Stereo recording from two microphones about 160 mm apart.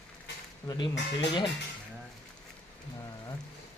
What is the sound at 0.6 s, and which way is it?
Speech, 25° left (ahead or behind).